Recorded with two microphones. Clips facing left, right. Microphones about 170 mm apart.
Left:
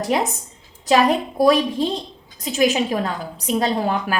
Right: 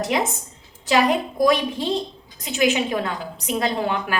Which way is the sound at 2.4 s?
35° left (ahead or behind).